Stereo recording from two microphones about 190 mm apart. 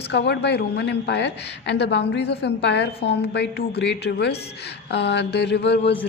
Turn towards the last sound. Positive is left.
turn(degrees=65)  # may be behind; listen again after turning